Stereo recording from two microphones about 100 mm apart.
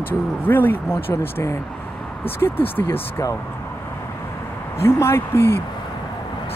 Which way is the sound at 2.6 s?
20° left (ahead or behind).